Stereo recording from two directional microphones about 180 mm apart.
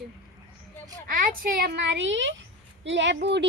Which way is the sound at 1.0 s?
50° right (ahead or behind).